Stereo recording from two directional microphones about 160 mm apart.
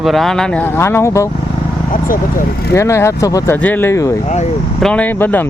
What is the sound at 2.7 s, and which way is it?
Speech, 15° left (ahead or behind).